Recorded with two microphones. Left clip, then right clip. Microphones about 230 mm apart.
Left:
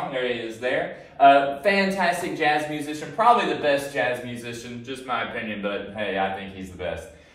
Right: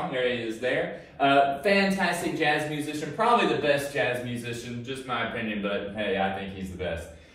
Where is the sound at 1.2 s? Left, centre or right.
Centre.